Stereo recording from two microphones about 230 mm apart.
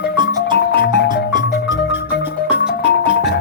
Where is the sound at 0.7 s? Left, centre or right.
Left.